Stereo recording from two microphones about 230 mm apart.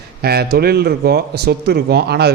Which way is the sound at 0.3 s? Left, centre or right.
Right.